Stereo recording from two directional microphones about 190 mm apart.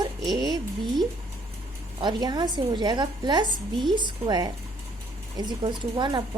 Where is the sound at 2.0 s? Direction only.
25° right (ahead or behind).